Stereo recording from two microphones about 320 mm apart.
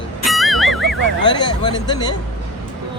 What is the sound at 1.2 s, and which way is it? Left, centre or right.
Speech, centre.